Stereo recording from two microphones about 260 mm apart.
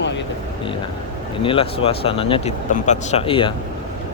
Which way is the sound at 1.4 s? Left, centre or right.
Left.